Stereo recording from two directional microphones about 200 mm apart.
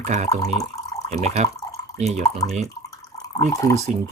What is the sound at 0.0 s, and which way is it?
Speech, 35° right (ahead or behind).